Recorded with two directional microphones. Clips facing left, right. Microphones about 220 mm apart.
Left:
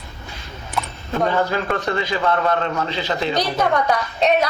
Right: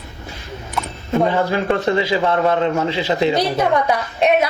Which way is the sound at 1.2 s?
25° right (ahead or behind).